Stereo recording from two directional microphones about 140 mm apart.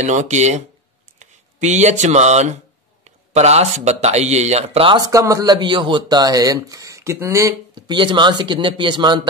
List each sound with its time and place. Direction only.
0.0 s speech: 55° right (ahead or behind)
4.9 s speech: 25° right (ahead or behind)